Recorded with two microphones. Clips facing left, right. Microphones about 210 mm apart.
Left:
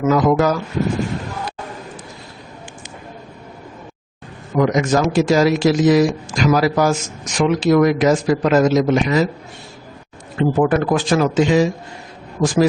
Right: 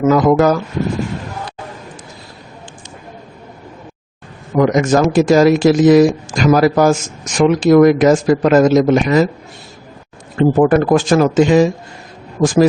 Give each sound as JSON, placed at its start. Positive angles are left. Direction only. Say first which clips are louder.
{"t": 0.0, "sound": "speech", "louder": "right 4 dB", "side_deg": -50}
{"t": 4.5, "sound": "speech", "louder": "right 4 dB", "side_deg": -50}
{"t": 10.3, "sound": "speech", "louder": "right 5 dB", "side_deg": -45}
{"t": 12.4, "sound": "speech", "louder": "right 4 dB", "side_deg": -40}